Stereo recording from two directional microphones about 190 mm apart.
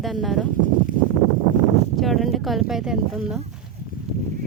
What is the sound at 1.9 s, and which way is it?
Speech, centre (ahead or behind).